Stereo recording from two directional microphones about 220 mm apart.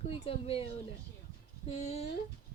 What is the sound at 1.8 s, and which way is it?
Speech, 30° left (ahead or behind).